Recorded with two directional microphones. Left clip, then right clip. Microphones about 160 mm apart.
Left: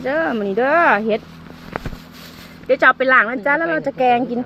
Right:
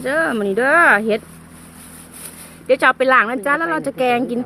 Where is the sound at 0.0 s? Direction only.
20° right (ahead or behind).